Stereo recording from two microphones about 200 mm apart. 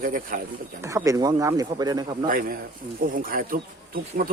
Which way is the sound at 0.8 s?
15° right (ahead or behind).